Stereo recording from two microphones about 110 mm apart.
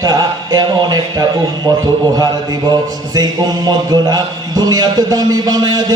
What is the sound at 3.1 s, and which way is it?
A man's voice, 40° right (ahead or behind).